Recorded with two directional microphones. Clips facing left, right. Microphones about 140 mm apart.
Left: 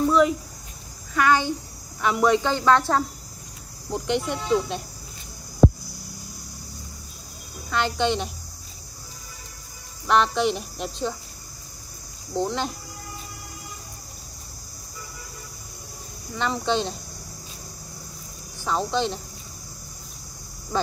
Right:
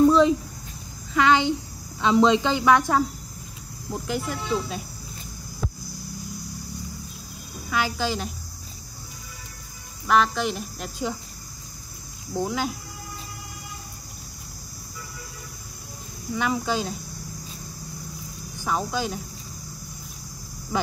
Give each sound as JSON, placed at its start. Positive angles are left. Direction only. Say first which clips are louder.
{"t": 0.1, "sound": "a sound", "louder": "right 1 dB", "side_deg": -25}
{"t": 1.1, "sound": "a woman's voice", "louder": "right 1 dB", "side_deg": -20}
{"t": 7.7, "sound": "speech", "louder": "left 3 dB", "side_deg": -5}
{"t": 10.0, "sound": "speech", "louder": "left 1 dB", "side_deg": 0}
{"t": 12.4, "sound": "speech", "louder": "even", "side_deg": -5}
{"t": 16.3, "sound": "speech", "louder": "left 1 dB", "side_deg": -5}
{"t": 18.6, "sound": "speech", "louder": "left 2 dB", "side_deg": -10}
{"t": 20.7, "sound": "speech", "louder": "left 1 dB", "side_deg": -10}